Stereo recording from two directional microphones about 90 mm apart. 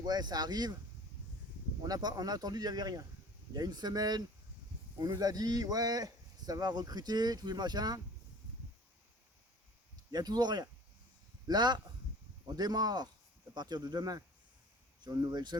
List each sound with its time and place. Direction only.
0.0 s speech: 50° right (ahead or behind)
1.8 s speech: 50° right (ahead or behind)
10.1 s speech: 50° right (ahead or behind)